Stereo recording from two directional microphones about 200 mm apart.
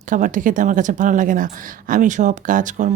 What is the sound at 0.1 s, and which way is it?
Speech, 40° right (ahead or behind).